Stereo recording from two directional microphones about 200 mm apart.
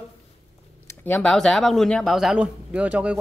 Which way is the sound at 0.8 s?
10° left (ahead or behind).